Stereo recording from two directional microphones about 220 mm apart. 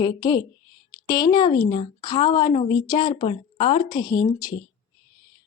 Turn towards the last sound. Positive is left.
turn(degrees=20)  # may be behind; listen again after turning